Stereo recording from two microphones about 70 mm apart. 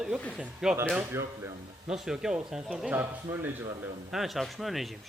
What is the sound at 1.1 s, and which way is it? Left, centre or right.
Speech, right.